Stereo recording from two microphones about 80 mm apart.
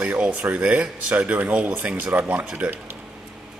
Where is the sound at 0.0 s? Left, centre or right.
Centre.